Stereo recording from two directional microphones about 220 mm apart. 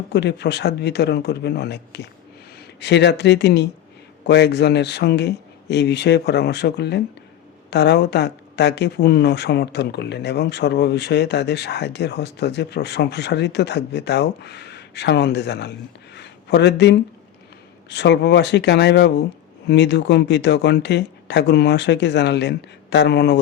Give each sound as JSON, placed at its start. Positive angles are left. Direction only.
{"t": 0.1, "sound": "speech", "side_deg": 50}
{"t": 16.1, "sound": "a sound", "side_deg": 50}
{"t": 17.8, "sound": "speech", "side_deg": 50}